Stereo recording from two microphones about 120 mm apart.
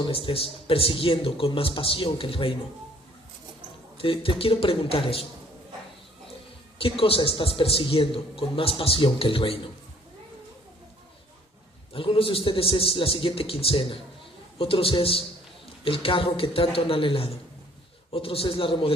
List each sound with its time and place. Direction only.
0.0 s a man's voice: 50° left (ahead or behind)
3.9 s a man's voice: 50° left (ahead or behind)
6.7 s a man's voice: 50° left (ahead or behind)
11.9 s a man's voice: 50° left (ahead or behind)